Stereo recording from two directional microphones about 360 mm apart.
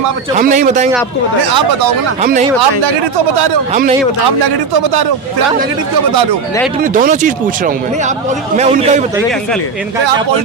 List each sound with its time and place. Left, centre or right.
0.3 s speech: right
1.5 s speech: right
2.2 s speech: right
4.3 s a man's voice: right
6.8 s a man's voice: right